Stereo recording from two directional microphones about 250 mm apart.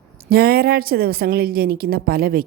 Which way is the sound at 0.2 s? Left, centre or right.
Right.